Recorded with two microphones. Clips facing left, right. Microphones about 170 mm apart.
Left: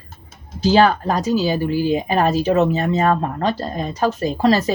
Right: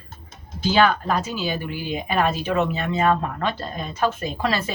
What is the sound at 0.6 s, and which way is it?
Speech, 40° left (ahead or behind).